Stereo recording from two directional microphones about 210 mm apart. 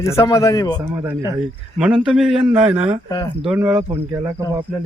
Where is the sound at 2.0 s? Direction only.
Centre (ahead or behind).